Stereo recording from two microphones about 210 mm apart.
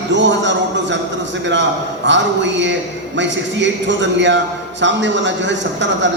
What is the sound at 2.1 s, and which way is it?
A man's voice, 60° right (ahead or behind).